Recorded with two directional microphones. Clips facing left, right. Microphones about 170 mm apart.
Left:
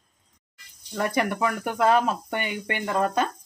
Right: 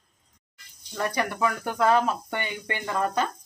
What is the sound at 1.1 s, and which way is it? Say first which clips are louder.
Speech: left 2 dB; 20° left (ahead or behind).